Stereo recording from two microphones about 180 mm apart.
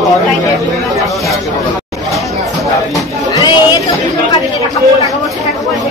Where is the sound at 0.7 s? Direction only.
Centre (ahead or behind).